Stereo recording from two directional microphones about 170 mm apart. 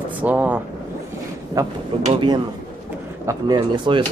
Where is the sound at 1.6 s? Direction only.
20° right (ahead or behind).